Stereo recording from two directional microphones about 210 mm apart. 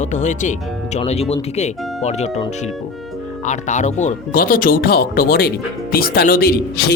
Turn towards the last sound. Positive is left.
turn(degrees=45)  # may be behind; listen again after turning